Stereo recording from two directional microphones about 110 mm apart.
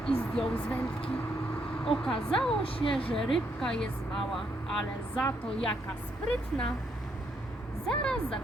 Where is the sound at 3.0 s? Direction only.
55° left (ahead or behind).